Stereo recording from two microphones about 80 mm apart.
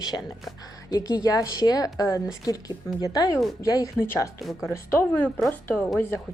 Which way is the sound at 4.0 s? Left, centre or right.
Left.